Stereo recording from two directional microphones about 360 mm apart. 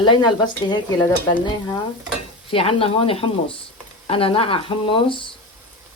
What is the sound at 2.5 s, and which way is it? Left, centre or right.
Speech, centre.